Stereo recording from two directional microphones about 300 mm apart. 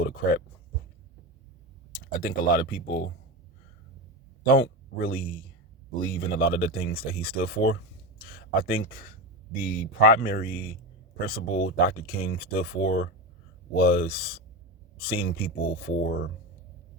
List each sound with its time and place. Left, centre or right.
0.0 s speech: left
2.1 s speech: left
4.4 s speech: left